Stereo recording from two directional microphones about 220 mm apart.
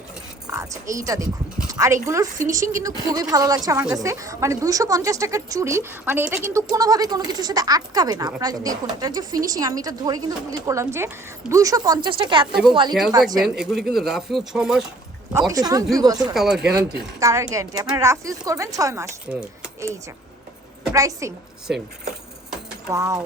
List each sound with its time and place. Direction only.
0.4 s a woman's voice: 15° right (ahead or behind)
12.9 s speech: centre (ahead or behind)
15.3 s a woman's voice: 15° right (ahead or behind)
16.3 s speech: centre (ahead or behind)
17.2 s a woman's voice: 15° right (ahead or behind)
20.9 s a woman's voice: 15° right (ahead or behind)
21.7 s speech: centre (ahead or behind)
22.9 s a woman's voice: 15° right (ahead or behind)